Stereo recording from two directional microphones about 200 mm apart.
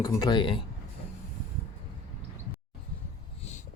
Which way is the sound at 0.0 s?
20° left (ahead or behind).